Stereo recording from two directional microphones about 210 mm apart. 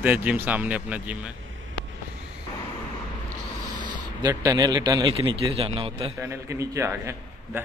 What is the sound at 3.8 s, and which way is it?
Speech, 20° right (ahead or behind).